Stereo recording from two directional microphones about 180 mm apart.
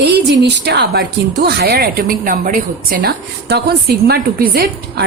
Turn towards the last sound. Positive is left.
turn(degrees=-60)  # may be behind; listen again after turning